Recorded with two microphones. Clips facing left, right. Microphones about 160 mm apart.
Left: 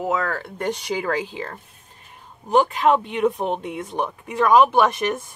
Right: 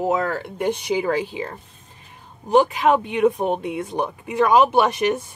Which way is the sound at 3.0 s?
10° right (ahead or behind).